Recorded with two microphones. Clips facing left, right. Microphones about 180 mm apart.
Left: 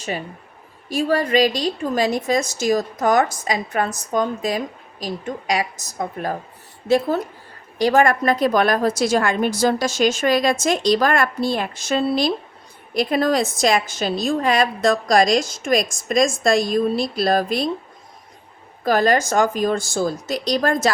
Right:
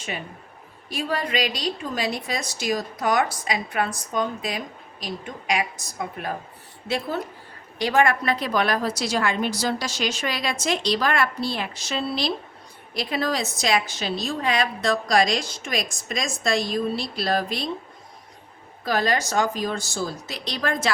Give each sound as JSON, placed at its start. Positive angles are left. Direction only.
{"t": 0.9, "sound": "a woman's voice", "side_deg": 45}
{"t": 18.9, "sound": "a woman's voice", "side_deg": 45}